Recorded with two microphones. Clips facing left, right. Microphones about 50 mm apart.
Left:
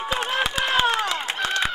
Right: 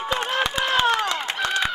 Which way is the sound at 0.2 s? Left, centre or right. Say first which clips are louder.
Even; centre.